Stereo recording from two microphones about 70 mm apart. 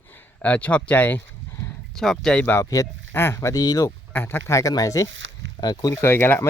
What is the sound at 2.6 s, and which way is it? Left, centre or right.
Speech, left.